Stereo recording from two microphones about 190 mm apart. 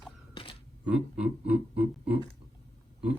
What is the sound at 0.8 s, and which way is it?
Speech, 5° right (ahead or behind).